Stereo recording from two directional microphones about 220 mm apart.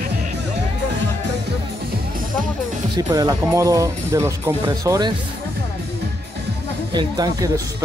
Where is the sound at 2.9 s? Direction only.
15° right (ahead or behind).